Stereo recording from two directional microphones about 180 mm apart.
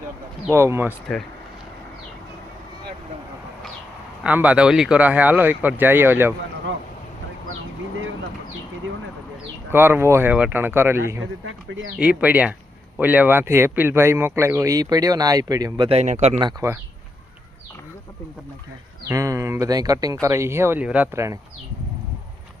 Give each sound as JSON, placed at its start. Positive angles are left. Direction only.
{"t": 0.5, "sound": "speech", "side_deg": -15}
{"t": 4.2, "sound": "speech", "side_deg": -10}
{"t": 9.7, "sound": "speech", "side_deg": -10}
{"t": 11.7, "sound": "speech", "side_deg": -90}
{"t": 11.9, "sound": "speech", "side_deg": -5}
{"t": 15.9, "sound": "a man's voice", "side_deg": -40}
{"t": 16.4, "sound": "speech", "side_deg": -20}
{"t": 19.0, "sound": "speech", "side_deg": -20}